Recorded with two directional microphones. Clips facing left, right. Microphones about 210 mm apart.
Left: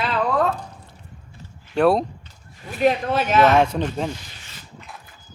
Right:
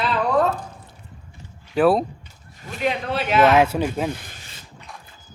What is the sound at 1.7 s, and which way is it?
Speech, 5° right (ahead or behind).